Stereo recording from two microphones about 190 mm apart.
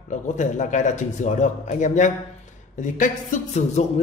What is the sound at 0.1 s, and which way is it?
A man's voice, 40° left (ahead or behind).